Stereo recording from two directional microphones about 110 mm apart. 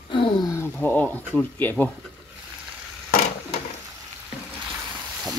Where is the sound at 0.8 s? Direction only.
15° left (ahead or behind).